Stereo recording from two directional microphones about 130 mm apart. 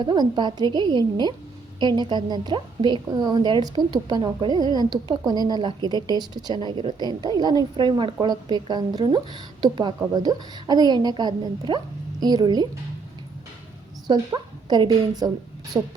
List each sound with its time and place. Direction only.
0.0 s a woman's voice: 35° right (ahead or behind)
14.1 s a woman's voice: 35° right (ahead or behind)
15.7 s speech: 20° right (ahead or behind)